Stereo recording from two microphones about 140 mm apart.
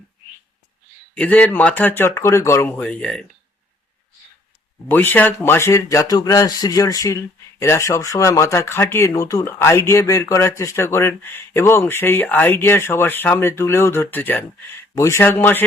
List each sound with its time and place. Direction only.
1.1 s speech: 10° left (ahead or behind)
4.9 s speech: 15° left (ahead or behind)